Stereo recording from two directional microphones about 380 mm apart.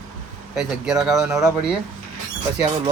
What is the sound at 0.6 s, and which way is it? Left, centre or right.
Speech, centre.